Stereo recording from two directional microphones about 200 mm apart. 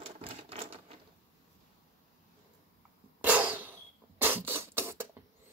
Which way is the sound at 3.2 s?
10° right (ahead or behind).